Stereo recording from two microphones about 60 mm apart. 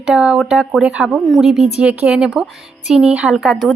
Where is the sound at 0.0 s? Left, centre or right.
Centre.